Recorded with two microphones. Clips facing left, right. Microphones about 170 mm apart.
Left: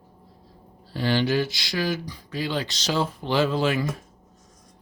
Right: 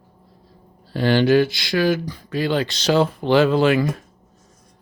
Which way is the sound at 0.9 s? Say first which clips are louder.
Right 7 dB; 60° right (ahead or behind).